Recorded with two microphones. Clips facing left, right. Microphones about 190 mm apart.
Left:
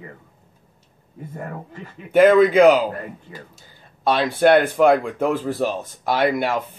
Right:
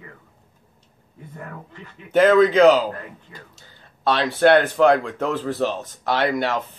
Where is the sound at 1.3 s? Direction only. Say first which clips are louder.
Left 4 dB; 45° left (ahead or behind).